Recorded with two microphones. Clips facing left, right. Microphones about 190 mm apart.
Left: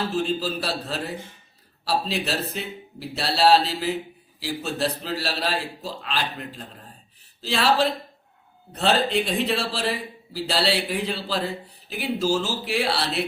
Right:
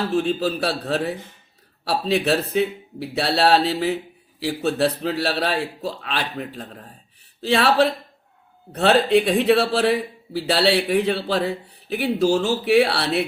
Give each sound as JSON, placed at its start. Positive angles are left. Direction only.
{"t": 0.1, "sound": "speech", "side_deg": -60}